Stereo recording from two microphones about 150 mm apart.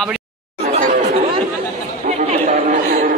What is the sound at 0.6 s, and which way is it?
Chatter, 50° right (ahead or behind).